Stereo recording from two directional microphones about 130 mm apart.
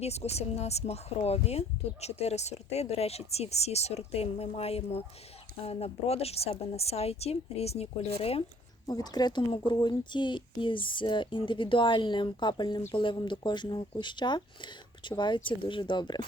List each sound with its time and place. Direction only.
0.0 s a woman's voice: 55° left (ahead or behind)
8.9 s speech: 30° left (ahead or behind)